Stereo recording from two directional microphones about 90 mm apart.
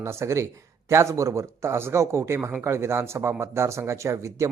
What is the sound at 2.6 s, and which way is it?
Speech, 30° right (ahead or behind).